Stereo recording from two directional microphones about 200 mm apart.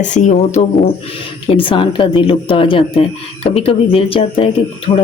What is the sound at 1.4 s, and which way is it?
Speech, 25° left (ahead or behind).